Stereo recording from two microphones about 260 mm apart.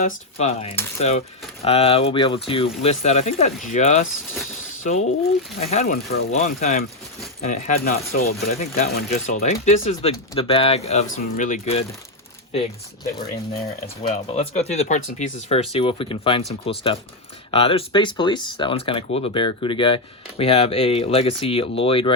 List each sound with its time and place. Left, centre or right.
0.0 s speech: left
13.8 s speech: left